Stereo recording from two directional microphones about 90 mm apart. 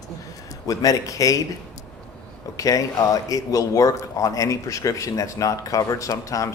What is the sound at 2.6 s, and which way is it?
Speech, 40° left (ahead or behind).